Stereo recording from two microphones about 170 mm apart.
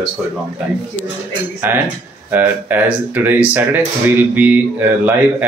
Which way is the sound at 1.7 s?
10° right (ahead or behind).